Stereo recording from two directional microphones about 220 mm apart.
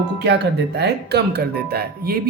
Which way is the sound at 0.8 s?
50° right (ahead or behind).